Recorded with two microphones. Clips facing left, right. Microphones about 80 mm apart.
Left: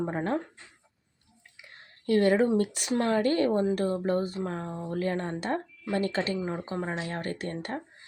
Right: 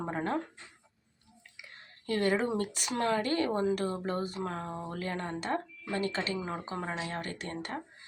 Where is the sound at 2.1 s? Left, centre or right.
Left.